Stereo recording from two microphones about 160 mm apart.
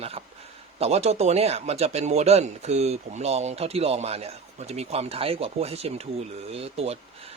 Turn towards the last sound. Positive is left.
turn(degrees=-40)  # may be behind; listen again after turning